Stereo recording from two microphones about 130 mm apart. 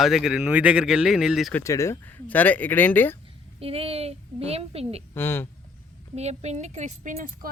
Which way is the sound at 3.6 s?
45° right (ahead or behind).